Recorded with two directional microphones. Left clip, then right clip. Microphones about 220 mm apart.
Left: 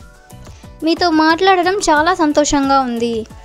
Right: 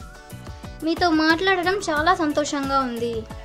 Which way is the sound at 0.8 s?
35° left (ahead or behind).